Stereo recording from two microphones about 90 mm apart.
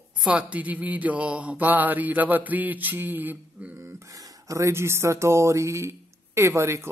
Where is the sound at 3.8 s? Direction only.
30° right (ahead or behind).